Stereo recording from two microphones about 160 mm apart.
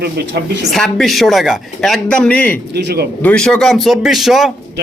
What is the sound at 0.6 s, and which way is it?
Speech, centre (ahead or behind).